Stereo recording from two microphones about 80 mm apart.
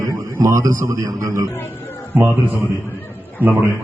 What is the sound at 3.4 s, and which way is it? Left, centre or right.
Speech, right.